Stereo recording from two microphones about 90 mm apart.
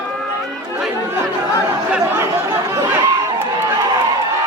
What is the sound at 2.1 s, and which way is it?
Chatter, 30° right (ahead or behind).